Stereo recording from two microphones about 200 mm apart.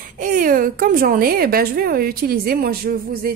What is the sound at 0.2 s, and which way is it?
A woman's voice, 40° right (ahead or behind).